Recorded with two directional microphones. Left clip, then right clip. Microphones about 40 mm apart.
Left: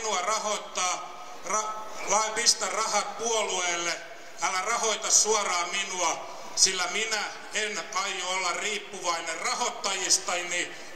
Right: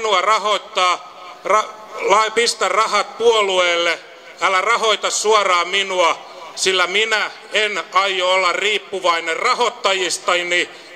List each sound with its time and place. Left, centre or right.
0.0 s a man's voice: left